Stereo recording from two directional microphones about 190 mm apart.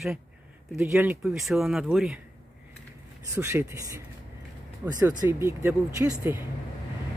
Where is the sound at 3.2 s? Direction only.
15° right (ahead or behind).